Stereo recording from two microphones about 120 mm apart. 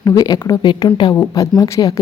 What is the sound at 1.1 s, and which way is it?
Speech, 25° left (ahead or behind).